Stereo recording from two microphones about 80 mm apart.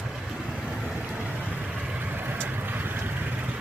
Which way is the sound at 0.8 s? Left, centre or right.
Centre.